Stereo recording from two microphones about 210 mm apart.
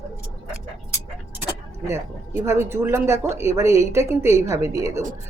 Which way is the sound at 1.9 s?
15° right (ahead or behind).